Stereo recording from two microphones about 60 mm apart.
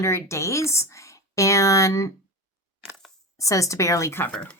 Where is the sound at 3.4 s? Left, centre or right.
Left.